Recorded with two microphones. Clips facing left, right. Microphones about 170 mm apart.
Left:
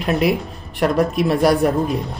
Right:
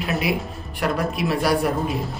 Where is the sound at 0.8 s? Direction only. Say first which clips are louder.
Left 6 dB; 40° left (ahead or behind).